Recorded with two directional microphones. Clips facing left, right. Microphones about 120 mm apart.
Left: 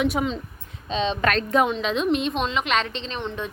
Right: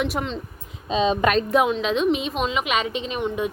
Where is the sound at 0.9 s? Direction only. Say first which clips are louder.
Right 3 dB; 10° right (ahead or behind).